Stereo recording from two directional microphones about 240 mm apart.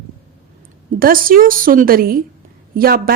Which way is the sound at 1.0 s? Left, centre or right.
Right.